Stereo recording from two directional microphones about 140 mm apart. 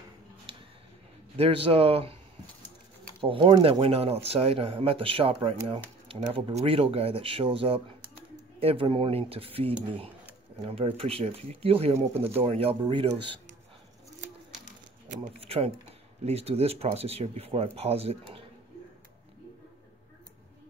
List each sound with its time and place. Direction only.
1.3 s speech: 45° right (ahead or behind)
3.2 s speech: 40° right (ahead or behind)
3.8 s speech: 45° right (ahead or behind)
15.4 s speech: 45° right (ahead or behind)